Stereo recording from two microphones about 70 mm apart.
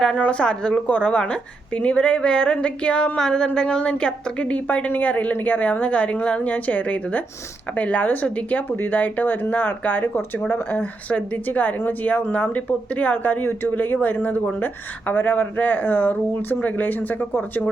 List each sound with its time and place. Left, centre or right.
0.0 s a woman's voice: centre